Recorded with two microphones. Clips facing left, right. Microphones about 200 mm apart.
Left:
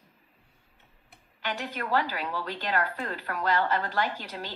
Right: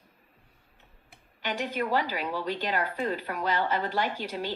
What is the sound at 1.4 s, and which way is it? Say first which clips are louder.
A woman's voice: right 3 dB; 15° right (ahead or behind).